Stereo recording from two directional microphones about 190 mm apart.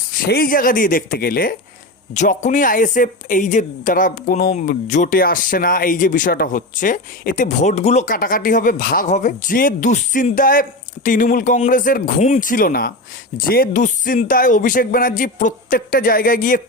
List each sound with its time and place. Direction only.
0.1 s speech: 50° left (ahead or behind)